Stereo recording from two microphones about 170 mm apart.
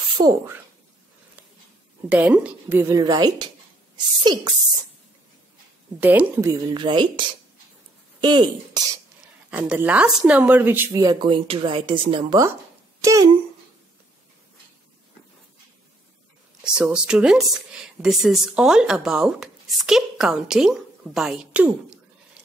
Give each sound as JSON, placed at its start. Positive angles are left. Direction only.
{"t": 0.2, "sound": "speech", "side_deg": -20}
{"t": 2.0, "sound": "a woman's voice", "side_deg": -10}
{"t": 3.0, "sound": "speech", "side_deg": -25}
{"t": 5.9, "sound": "speech", "side_deg": -10}
{"t": 8.2, "sound": "speech", "side_deg": -25}
{"t": 9.5, "sound": "speech", "side_deg": -10}
{"t": 13.0, "sound": "speech", "side_deg": -20}
{"t": 16.6, "sound": "speech", "side_deg": -5}